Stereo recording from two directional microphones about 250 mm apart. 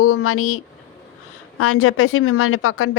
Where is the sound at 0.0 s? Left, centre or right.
Left.